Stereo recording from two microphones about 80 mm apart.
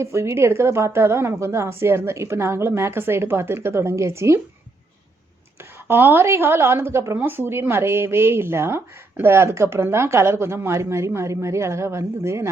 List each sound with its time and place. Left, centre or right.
0.0 s speech: right
5.9 s speech: right